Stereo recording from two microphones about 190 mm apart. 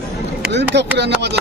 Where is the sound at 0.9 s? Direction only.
65° right (ahead or behind).